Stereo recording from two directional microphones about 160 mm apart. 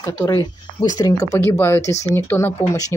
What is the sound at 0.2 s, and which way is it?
Speech, 20° left (ahead or behind).